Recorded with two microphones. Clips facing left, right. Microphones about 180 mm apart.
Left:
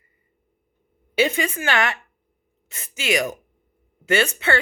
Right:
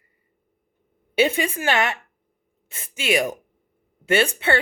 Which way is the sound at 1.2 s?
30° right (ahead or behind).